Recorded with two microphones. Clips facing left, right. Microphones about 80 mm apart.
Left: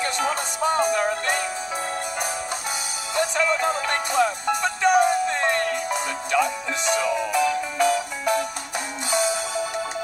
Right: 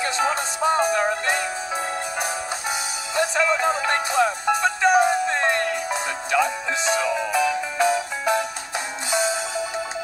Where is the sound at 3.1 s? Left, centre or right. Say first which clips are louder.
Right 1 dB; centre.